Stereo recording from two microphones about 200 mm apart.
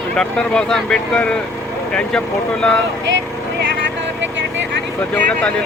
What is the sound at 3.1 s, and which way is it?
Vehicle, 60° right (ahead or behind).